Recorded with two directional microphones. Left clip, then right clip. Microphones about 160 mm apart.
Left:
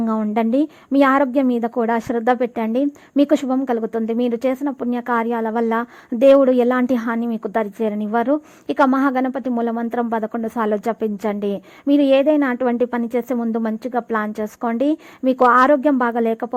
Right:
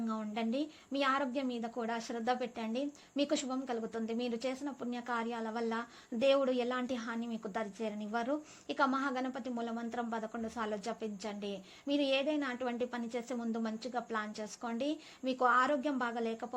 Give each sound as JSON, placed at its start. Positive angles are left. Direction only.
{"t": 0.1, "sound": "a woman's voice", "side_deg": 45}
{"t": 15.4, "sound": "a woman's voice", "side_deg": 35}